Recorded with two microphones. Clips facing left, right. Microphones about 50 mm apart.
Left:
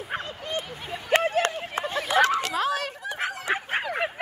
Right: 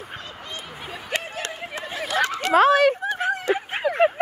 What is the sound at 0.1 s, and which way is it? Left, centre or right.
Bow-wow, left.